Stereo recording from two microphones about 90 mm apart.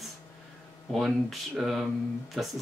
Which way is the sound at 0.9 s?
Centre (ahead or behind).